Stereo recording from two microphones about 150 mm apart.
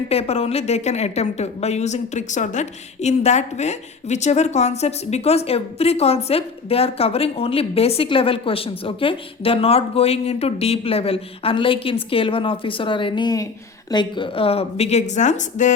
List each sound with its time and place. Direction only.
0.1 s a woman's voice: 45° left (ahead or behind)